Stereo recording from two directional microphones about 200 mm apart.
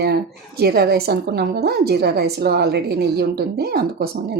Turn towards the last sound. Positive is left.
turn(degrees=-50)  # may be behind; listen again after turning